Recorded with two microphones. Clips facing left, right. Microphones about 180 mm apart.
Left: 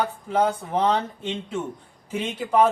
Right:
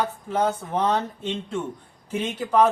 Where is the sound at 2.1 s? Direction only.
10° left (ahead or behind).